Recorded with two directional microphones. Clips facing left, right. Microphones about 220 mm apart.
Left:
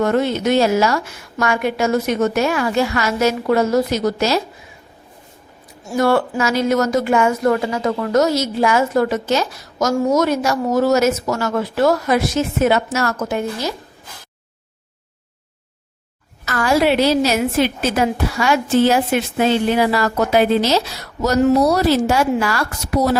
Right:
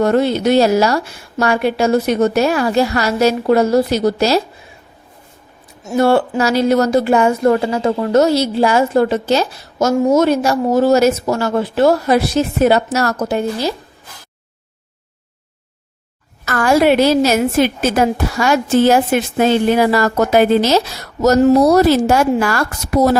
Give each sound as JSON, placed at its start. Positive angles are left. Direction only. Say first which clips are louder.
{"t": 0.0, "sound": "speech", "louder": "right 3 dB", "side_deg": -35}
{"t": 5.8, "sound": "speech", "louder": "right 3 dB", "side_deg": -25}
{"t": 16.5, "sound": "a woman's voice", "louder": "right 4 dB", "side_deg": -50}